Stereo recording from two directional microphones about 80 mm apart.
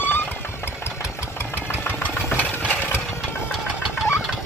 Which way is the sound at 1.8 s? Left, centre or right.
Left.